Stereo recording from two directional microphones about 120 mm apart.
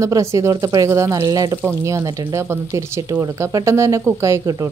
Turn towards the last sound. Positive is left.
turn(degrees=-30)  # may be behind; listen again after turning